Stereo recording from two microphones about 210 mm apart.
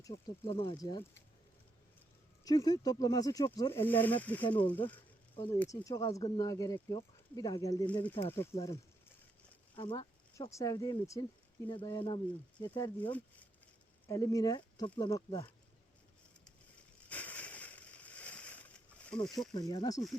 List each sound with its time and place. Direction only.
0.0 s speech: 20° left (ahead or behind)
2.4 s speech: 20° left (ahead or behind)
9.7 s speech: 25° left (ahead or behind)
17.1 s a sound: 5° left (ahead or behind)
19.5 s speech: 20° left (ahead or behind)